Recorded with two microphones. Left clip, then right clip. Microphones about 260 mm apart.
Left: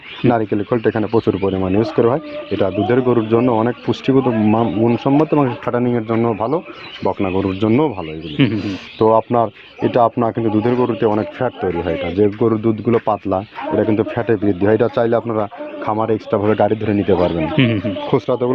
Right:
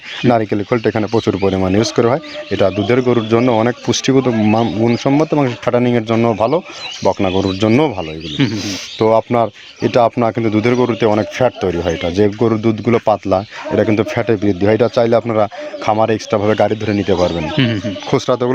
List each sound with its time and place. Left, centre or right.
0.3 s speech: right
18.3 s speech: right